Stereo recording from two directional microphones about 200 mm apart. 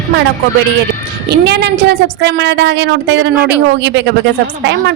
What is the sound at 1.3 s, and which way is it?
A woman's voice, 55° right (ahead or behind).